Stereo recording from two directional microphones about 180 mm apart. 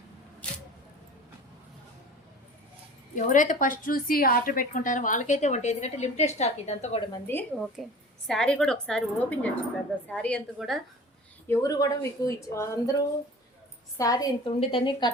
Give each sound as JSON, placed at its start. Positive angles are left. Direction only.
{"t": 0.4, "sound": "a sound", "side_deg": 5}
{"t": 3.2, "sound": "a woman's voice", "side_deg": 45}
{"t": 7.1, "sound": "a woman's voice", "side_deg": 10}
{"t": 7.5, "sound": "a woman's voice", "side_deg": 0}
{"t": 11.4, "sound": "a woman's voice", "side_deg": 15}
{"t": 14.0, "sound": "a woman's voice", "side_deg": 20}